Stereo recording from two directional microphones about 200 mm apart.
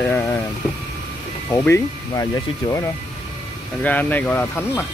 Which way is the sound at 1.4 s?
10° left (ahead or behind).